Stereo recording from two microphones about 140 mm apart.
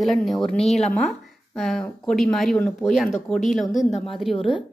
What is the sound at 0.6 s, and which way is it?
Speech, 50° left (ahead or behind).